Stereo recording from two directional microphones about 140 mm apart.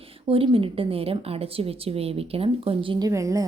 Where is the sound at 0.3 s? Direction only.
40° right (ahead or behind).